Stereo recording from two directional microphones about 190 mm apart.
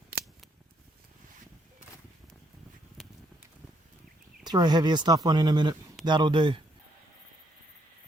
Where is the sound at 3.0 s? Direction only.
Centre (ahead or behind).